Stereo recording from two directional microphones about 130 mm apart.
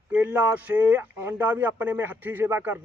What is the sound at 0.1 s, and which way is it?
Speech, 15° right (ahead or behind).